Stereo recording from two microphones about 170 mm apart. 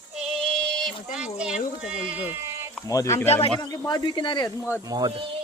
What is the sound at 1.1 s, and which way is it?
Speech, 5° right (ahead or behind).